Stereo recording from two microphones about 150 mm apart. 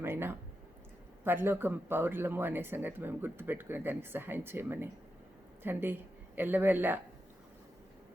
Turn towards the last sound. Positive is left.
turn(degrees=-10)  # may be behind; listen again after turning